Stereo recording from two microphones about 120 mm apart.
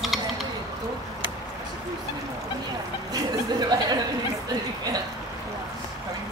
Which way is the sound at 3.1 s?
35° right (ahead or behind).